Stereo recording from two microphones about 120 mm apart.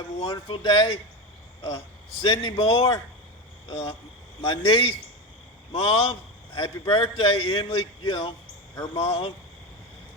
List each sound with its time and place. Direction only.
0.2 s a man's voice: 45° left (ahead or behind)
2.2 s a man's voice: 40° left (ahead or behind)
8.7 s speech: 30° left (ahead or behind)
9.0 s a man's voice: 50° left (ahead or behind)